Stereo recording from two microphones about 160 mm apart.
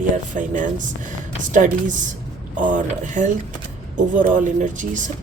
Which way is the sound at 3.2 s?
50° right (ahead or behind).